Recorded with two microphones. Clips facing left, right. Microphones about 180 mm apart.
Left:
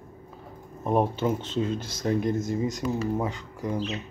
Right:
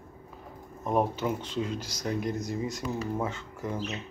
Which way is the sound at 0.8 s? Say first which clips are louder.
Left 3 dB; 30° left (ahead or behind).